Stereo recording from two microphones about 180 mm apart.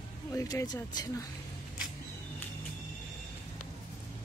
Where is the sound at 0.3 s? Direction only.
15° left (ahead or behind).